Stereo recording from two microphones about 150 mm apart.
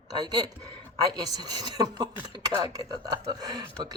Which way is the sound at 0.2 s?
30° right (ahead or behind).